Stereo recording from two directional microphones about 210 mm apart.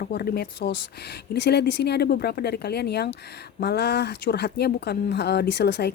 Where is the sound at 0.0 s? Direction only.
45° left (ahead or behind).